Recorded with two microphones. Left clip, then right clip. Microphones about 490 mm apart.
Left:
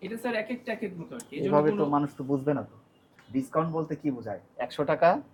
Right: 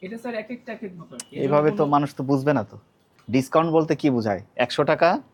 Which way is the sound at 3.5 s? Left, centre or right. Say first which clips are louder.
Right 10 dB; right.